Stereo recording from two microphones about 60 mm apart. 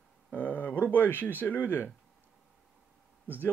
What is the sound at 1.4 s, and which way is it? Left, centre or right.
Speech, left.